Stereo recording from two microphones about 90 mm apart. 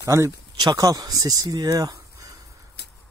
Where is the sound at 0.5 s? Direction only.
45° right (ahead or behind).